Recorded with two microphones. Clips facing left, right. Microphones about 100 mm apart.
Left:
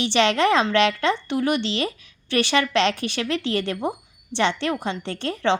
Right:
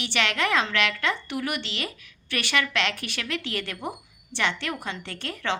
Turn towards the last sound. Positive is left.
turn(degrees=25)  # may be behind; listen again after turning